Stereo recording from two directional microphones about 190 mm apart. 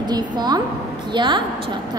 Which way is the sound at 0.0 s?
20° right (ahead or behind).